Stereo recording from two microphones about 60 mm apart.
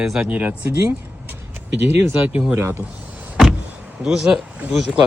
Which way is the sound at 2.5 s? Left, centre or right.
Right.